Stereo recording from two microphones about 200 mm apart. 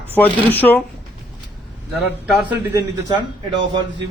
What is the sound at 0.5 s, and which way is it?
Speech, 10° left (ahead or behind).